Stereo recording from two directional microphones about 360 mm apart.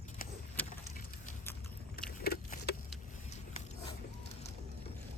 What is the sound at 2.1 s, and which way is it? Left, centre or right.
Vehicle, left.